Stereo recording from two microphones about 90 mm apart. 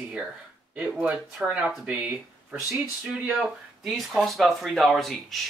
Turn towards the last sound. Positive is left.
turn(degrees=0)  # may be behind; listen again after turning